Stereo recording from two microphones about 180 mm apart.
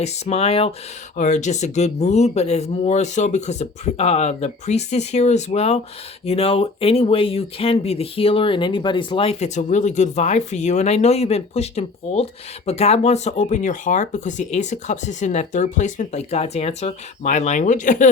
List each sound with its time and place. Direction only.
0.0 s speech: 35° left (ahead or behind)